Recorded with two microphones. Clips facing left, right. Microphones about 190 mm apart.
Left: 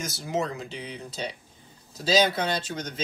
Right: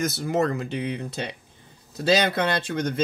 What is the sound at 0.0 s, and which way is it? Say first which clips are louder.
Speech: right 6 dB; 55° right (ahead or behind).